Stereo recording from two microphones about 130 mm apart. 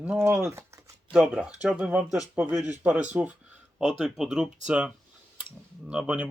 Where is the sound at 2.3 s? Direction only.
10° right (ahead or behind).